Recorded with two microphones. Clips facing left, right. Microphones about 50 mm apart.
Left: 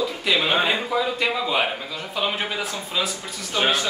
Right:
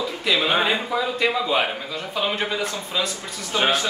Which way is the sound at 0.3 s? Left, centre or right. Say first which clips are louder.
Right 1 dB; centre.